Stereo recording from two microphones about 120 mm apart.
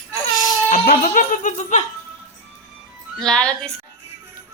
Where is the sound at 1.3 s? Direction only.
90° left.